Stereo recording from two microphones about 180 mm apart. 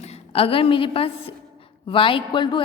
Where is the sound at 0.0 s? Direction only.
35° left (ahead or behind).